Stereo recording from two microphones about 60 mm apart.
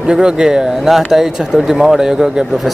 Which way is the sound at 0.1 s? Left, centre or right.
Centre.